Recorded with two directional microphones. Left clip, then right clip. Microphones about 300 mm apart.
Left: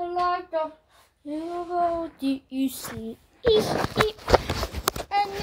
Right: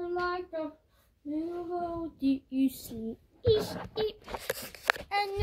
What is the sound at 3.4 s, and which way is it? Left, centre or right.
Speech, left.